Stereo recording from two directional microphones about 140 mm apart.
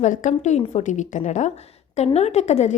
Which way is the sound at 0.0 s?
60° left (ahead or behind).